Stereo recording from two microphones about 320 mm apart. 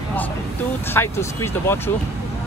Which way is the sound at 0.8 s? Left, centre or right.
Centre.